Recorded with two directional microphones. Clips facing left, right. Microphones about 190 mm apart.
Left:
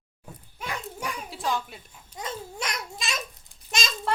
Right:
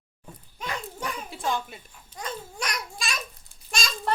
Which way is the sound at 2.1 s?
25° left (ahead or behind).